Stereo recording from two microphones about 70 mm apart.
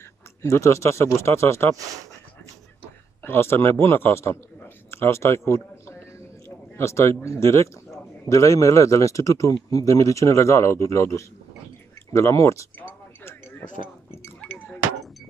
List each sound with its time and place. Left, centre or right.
0.4 s speech: left
3.2 s a man's voice: left
13.2 s a sound: left